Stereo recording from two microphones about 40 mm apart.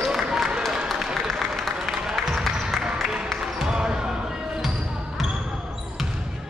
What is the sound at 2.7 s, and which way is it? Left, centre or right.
Music, centre.